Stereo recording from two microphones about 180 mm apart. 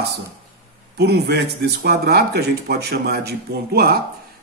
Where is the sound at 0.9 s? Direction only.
65° right (ahead or behind).